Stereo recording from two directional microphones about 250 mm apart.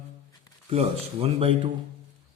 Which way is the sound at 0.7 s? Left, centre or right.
Right.